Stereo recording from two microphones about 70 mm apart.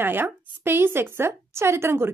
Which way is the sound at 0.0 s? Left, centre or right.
Right.